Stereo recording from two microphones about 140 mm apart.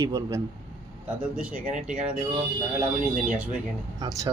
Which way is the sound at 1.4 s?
10° right (ahead or behind).